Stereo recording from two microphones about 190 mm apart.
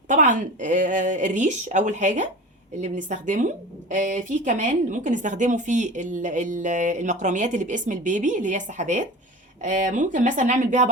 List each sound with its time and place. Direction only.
0.1 s a woman's voice: 40° right (ahead or behind)